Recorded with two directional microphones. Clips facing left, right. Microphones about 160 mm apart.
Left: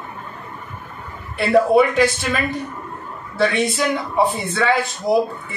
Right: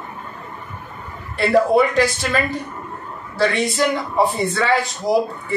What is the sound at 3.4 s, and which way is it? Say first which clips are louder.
Speech: even; centre (ahead or behind).